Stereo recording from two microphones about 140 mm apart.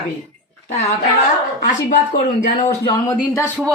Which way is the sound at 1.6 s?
65° left (ahead or behind).